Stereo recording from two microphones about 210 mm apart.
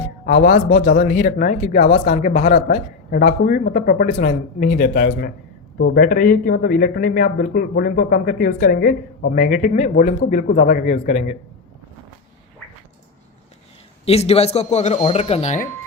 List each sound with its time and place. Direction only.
0.3 s speech: 40° left (ahead or behind)
14.0 s a man's voice: 30° left (ahead or behind)